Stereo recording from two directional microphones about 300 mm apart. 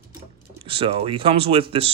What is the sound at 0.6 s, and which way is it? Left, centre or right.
Speech, centre.